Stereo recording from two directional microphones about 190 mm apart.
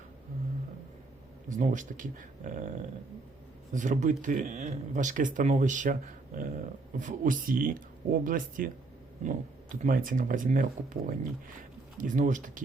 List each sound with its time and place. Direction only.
1.5 s speech: 40° right (ahead or behind)